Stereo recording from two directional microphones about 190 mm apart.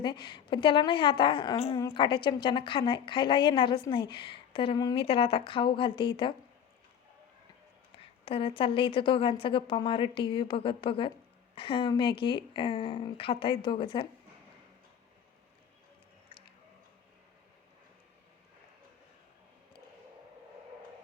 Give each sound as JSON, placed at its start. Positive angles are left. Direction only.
{"t": 0.0, "sound": "a woman's voice", "side_deg": 25}
{"t": 7.9, "sound": "a woman's voice", "side_deg": 30}
{"t": 16.3, "sound": "music", "side_deg": 30}